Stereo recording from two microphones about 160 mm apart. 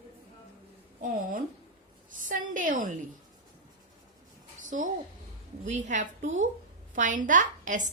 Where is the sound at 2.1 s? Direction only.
55° right (ahead or behind).